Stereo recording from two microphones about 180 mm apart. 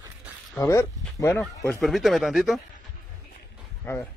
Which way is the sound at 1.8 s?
Centre (ahead or behind).